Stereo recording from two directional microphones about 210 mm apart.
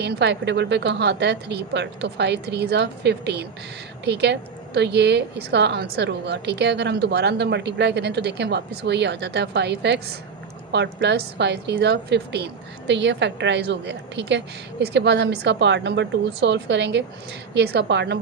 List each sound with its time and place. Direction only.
0.0 s a woman's voice: 55° right (ahead or behind)